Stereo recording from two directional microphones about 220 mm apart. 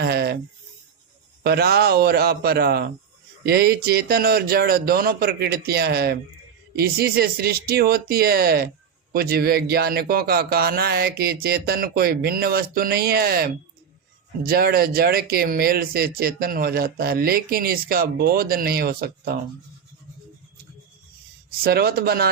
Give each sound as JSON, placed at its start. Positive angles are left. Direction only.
{"t": 0.0, "sound": "a sound", "side_deg": -45}
{"t": 1.5, "sound": "speech", "side_deg": -45}
{"t": 21.6, "sound": "speech", "side_deg": -45}